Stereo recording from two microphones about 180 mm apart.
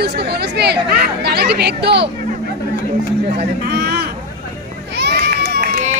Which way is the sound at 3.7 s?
65° right (ahead or behind).